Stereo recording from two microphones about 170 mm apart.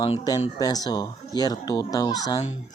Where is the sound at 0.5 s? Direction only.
20° left (ahead or behind).